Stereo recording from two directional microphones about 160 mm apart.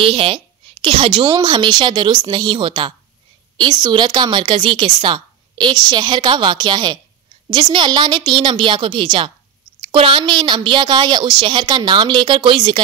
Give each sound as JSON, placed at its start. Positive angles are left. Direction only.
{"t": 0.0, "sound": "speech", "side_deg": -35}